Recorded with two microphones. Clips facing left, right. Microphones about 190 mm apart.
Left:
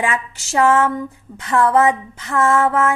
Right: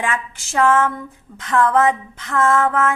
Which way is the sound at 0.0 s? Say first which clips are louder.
Left 2 dB; 10° left (ahead or behind).